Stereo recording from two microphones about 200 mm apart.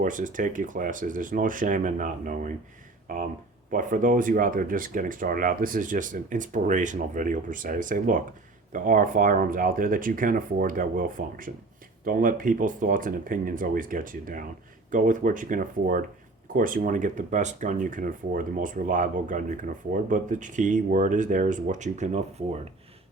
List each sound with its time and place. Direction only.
0.0 s speech: 40° right (ahead or behind)